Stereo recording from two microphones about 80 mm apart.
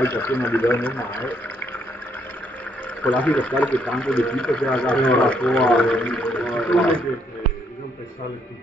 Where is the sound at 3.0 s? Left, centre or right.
Centre.